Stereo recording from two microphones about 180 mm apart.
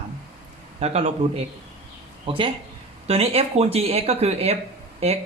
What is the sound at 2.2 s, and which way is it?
A woman's voice, 30° right (ahead or behind).